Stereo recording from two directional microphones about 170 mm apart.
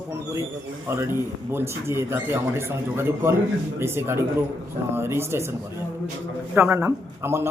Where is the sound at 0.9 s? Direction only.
15° right (ahead or behind).